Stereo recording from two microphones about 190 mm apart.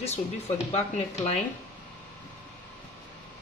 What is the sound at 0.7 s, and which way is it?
Speech, 35° left (ahead or behind).